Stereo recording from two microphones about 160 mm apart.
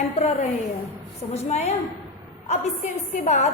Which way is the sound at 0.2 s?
40° left (ahead or behind).